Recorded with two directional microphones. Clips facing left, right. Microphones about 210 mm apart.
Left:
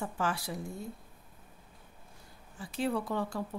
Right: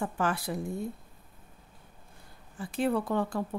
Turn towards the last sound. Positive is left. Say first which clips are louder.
# right 4 dB
turn(degrees=-55)  # may be behind; listen again after turning